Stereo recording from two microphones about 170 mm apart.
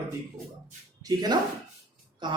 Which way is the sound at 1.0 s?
25° right (ahead or behind).